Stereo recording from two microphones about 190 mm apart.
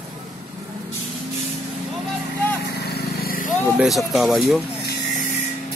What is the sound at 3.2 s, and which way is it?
Vehicle, 50° left (ahead or behind).